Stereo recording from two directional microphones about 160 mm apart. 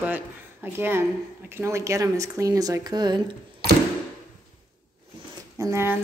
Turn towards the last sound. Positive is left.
turn(degrees=-15)  # may be behind; listen again after turning